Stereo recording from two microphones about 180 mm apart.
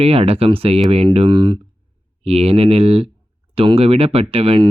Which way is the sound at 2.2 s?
35° right (ahead or behind).